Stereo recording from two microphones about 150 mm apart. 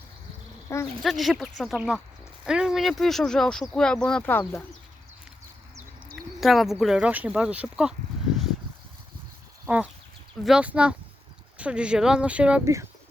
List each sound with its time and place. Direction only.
0.7 s speech: 20° left (ahead or behind)
1.0 s speech: centre (ahead or behind)
6.4 s speech: centre (ahead or behind)
9.6 s speech: 10° right (ahead or behind)